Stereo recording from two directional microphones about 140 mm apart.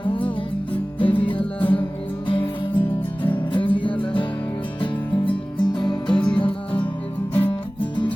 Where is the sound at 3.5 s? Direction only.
35° left (ahead or behind).